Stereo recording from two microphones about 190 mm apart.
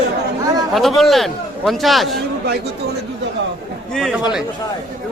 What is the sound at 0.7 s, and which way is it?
A man's voice, centre (ahead or behind).